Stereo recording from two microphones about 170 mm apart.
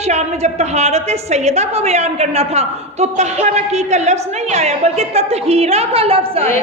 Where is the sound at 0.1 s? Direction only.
40° right (ahead or behind).